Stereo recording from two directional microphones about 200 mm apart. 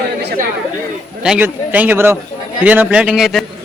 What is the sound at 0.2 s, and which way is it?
Chatter, 55° right (ahead or behind).